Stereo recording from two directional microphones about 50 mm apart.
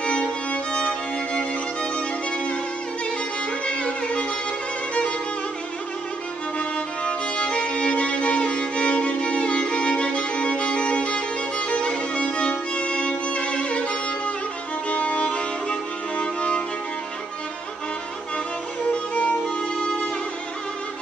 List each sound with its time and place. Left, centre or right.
0.0 s music: left
3.6 s music: left
6.6 s music: left
18.9 s music: left
19.4 s music: centre